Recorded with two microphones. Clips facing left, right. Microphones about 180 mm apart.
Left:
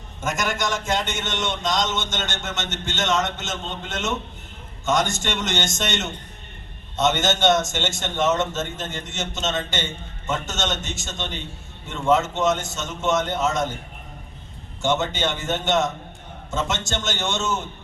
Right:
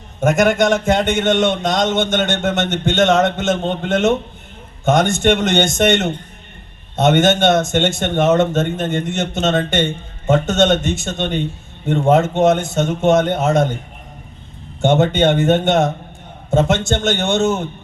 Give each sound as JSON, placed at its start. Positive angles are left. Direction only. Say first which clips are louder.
{"t": 0.2, "sound": "a man's voice", "louder": "right 12 dB", "side_deg": -60}
{"t": 14.8, "sound": "a man's voice", "louder": "right 9 dB", "side_deg": -55}